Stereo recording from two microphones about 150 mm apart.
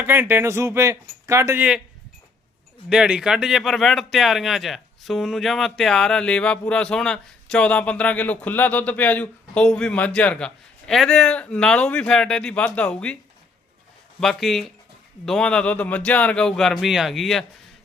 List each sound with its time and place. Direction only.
0.0 s speech: 15° right (ahead or behind)
2.9 s speech: 5° right (ahead or behind)
14.2 s speech: centre (ahead or behind)